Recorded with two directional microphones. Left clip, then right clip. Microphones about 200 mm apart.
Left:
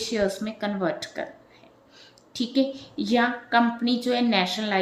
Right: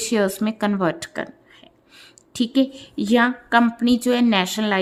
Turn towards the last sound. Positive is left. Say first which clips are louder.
# right 3 dB
turn(degrees=-45)  # may be behind; listen again after turning